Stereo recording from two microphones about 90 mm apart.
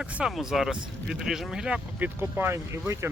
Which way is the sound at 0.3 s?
Centre (ahead or behind).